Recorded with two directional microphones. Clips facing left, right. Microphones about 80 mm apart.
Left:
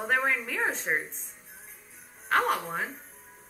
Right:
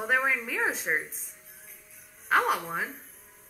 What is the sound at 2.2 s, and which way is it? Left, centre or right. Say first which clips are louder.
Speech: right 1 dB; centre.